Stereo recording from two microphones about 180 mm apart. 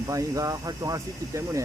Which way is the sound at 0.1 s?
20° right (ahead or behind).